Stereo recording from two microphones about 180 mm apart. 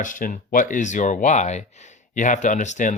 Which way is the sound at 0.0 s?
45° left (ahead or behind).